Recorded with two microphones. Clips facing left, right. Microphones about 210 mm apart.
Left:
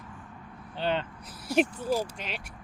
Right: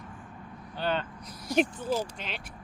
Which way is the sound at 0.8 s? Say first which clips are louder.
Left 1 dB; 20° left (ahead or behind).